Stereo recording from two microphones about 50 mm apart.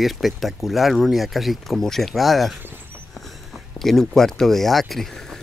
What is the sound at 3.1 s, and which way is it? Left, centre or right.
Speech, centre.